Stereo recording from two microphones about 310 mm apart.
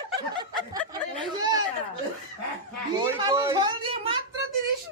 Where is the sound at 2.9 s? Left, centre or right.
Centre.